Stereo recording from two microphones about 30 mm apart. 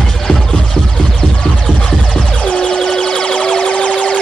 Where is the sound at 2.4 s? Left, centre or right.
Left.